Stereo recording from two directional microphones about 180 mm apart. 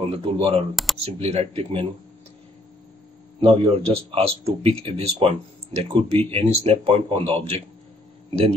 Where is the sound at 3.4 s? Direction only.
30° right (ahead or behind).